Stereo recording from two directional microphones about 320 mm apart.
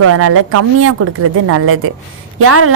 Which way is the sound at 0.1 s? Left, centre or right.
Right.